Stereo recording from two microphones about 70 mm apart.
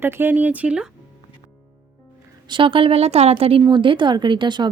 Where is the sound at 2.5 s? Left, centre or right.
Right.